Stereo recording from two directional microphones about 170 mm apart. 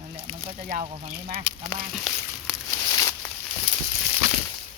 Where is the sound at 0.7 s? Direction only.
50° right (ahead or behind).